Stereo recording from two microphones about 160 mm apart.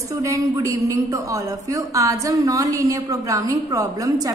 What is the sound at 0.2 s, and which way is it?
A woman's voice, 20° right (ahead or behind).